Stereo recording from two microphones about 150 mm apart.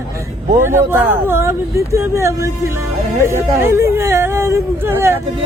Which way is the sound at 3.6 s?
15° right (ahead or behind).